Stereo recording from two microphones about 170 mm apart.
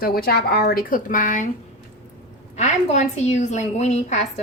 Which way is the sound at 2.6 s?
40° left (ahead or behind).